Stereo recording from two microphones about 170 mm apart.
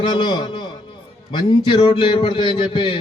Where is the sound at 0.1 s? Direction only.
30° left (ahead or behind).